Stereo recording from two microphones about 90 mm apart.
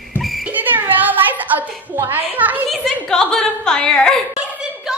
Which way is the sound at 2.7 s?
5° left (ahead or behind).